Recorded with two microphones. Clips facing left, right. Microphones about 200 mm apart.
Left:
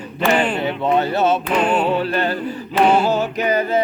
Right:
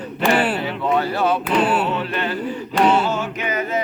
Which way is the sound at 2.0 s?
40° left (ahead or behind).